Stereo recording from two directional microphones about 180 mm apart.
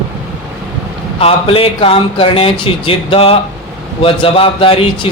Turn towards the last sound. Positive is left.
turn(degrees=30)  # may be behind; listen again after turning